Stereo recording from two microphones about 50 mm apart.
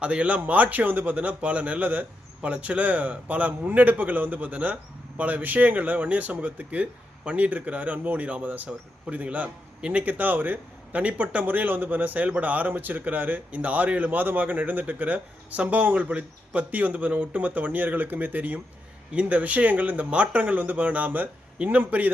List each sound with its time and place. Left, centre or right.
0.0 s a man's voice: right
11.4 s a man's voice: right